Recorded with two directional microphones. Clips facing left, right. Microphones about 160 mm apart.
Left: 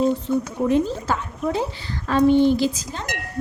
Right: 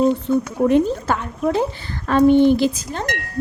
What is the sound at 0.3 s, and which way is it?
Speech, 60° right (ahead or behind).